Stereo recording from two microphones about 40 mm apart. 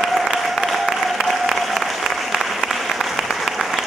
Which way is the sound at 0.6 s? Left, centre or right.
Centre.